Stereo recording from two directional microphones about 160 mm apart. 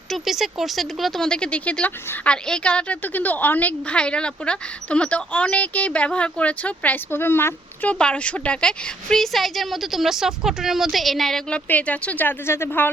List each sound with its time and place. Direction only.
0.1 s speech: centre (ahead or behind); by 12.9 s 15° left (ahead or behind)